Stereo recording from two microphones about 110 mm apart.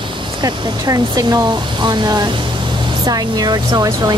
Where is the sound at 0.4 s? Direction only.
35° right (ahead or behind).